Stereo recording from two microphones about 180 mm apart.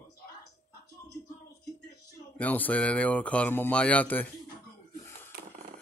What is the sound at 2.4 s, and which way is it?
Speech, 10° left (ahead or behind).